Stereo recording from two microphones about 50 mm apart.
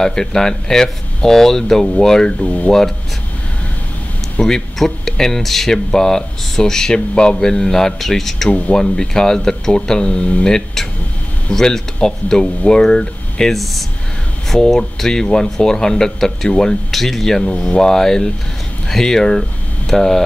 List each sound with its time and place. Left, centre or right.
0.0 s speech: centre
2.4 s speech: left
4.4 s speech: centre
8.5 s speech: left
8.7 s speech: centre
16.9 s speech: centre